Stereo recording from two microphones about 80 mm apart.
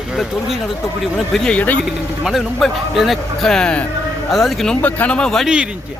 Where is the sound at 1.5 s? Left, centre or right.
Centre.